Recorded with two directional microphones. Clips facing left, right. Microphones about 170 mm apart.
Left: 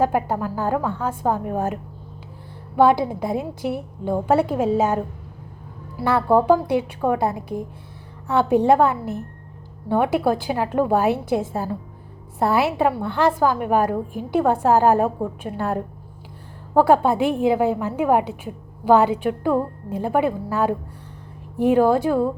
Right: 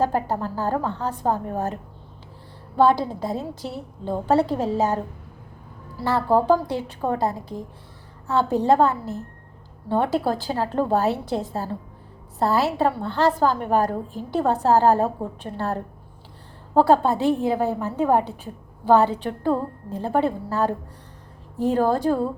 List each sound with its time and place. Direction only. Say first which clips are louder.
0.0 s a woman's voice: left 2 dB; 15° left (ahead or behind)
6.0 s a woman's voice: left 2 dB; 20° left (ahead or behind)